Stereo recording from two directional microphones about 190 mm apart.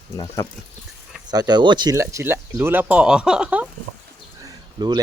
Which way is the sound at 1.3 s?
20° right (ahead or behind).